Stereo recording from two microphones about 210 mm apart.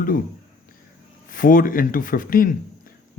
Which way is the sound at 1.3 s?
40° left (ahead or behind).